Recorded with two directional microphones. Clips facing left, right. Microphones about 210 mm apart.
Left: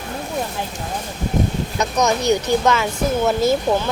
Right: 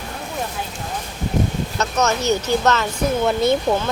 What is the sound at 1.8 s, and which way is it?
Speech, 15° left (ahead or behind).